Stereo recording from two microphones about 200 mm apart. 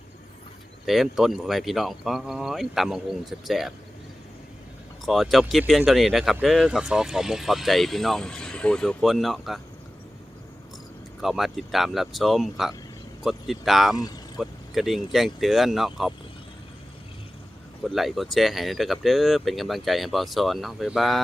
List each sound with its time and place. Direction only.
0.9 s speech: centre (ahead or behind)
5.0 s speech: centre (ahead or behind)
11.2 s speech: centre (ahead or behind)
13.9 s speech: 20° left (ahead or behind)
14.3 s speech: centre (ahead or behind)
17.8 s speech: centre (ahead or behind)